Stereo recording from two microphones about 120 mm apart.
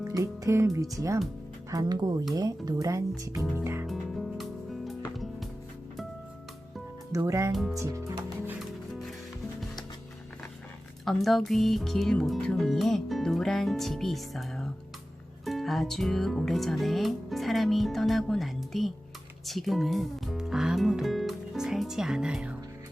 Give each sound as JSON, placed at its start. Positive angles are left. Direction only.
{"t": 0.2, "sound": "speech", "side_deg": -25}
{"t": 3.8, "sound": "music", "side_deg": 0}
{"t": 7.1, "sound": "speech", "side_deg": -25}
{"t": 7.5, "sound": "speech", "side_deg": 0}
{"t": 7.8, "sound": "music", "side_deg": -25}
{"t": 8.9, "sound": "music", "side_deg": 0}
{"t": 11.0, "sound": "speech", "side_deg": 0}